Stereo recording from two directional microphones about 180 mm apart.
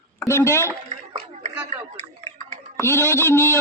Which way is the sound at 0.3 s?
15° left (ahead or behind).